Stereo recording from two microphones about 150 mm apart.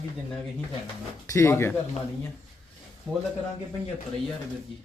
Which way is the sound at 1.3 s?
20° left (ahead or behind).